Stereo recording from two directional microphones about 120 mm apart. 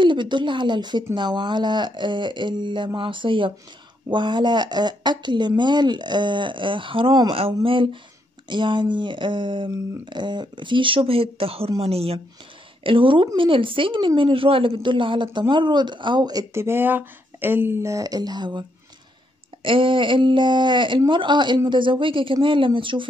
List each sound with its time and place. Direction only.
0.0 s speech: 40° right (ahead or behind); by 12.2 s 55° right (ahead or behind)
12.8 s speech: 45° right (ahead or behind)
16.5 s speech: 20° right (ahead or behind); by 23.0 s 45° right (ahead or behind)